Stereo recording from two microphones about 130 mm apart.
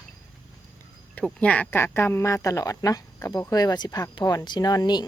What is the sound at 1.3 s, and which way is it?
Speech, 10° left (ahead or behind).